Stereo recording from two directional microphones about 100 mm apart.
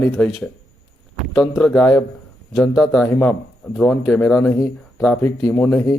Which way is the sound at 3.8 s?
15° left (ahead or behind).